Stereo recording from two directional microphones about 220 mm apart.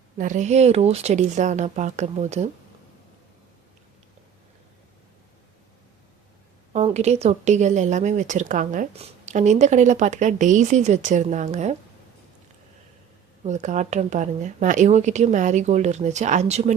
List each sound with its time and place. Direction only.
0.2 s speech: 35° right (ahead or behind)
6.7 s speech: 30° right (ahead or behind)
13.4 s speech: 30° right (ahead or behind)